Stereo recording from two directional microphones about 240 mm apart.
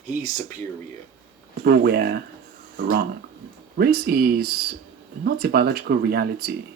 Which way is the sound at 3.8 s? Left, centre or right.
Right.